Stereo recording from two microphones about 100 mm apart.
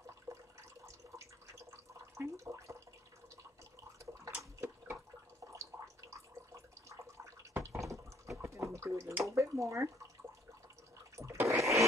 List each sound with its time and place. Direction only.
0.3 s water: 30° right (ahead or behind)
5.5 s a sound: 30° right (ahead or behind)
9.2 s speech: 30° right (ahead or behind)
11.1 s toilet flush: 30° right (ahead or behind)